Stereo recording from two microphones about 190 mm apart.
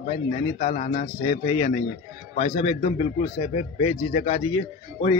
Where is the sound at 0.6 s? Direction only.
45° left (ahead or behind).